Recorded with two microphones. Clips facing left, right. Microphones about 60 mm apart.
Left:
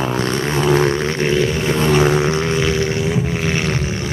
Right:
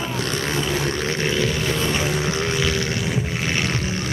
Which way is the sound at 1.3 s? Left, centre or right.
Centre.